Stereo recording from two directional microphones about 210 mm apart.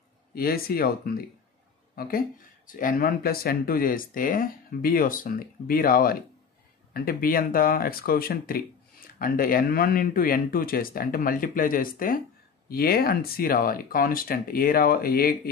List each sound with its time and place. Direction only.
0.3 s speech: 45° left (ahead or behind)